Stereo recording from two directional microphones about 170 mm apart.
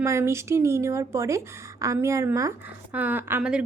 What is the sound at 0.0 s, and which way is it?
A woman's voice, 15° right (ahead or behind).